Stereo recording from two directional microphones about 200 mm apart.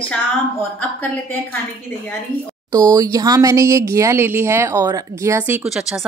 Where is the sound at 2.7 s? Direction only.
20° right (ahead or behind).